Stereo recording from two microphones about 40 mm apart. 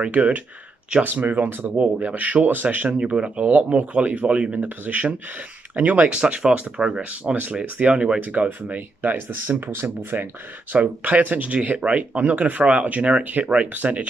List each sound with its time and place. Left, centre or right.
0.0 s speech: right
1.8 s speech: right
3.0 s speech: right
7.6 s speech: right
7.9 s speech: right
8.6 s speech: right
10.7 s speech: right